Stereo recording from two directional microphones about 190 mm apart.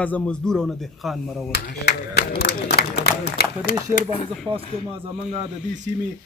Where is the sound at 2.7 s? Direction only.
55° left (ahead or behind).